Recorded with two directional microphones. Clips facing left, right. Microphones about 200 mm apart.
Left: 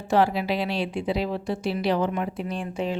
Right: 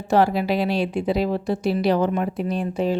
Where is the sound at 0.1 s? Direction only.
40° right (ahead or behind).